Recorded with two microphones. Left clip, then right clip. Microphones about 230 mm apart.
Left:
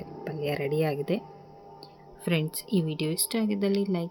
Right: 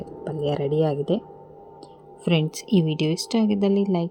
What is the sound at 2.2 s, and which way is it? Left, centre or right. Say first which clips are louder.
A woman's voice: right 6 dB; centre.